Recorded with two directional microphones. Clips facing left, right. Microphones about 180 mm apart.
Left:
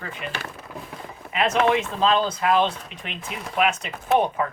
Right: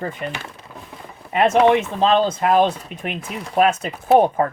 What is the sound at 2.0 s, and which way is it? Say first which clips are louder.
Speech: right 4 dB; 40° right (ahead or behind).